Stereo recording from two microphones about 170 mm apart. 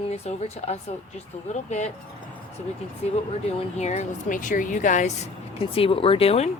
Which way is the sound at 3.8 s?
45° left (ahead or behind).